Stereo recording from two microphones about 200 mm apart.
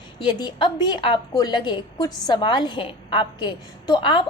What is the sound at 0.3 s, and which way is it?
A woman's voice, 20° left (ahead or behind).